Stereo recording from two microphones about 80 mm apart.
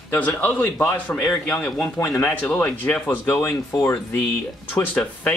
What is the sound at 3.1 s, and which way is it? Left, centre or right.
Speech, left.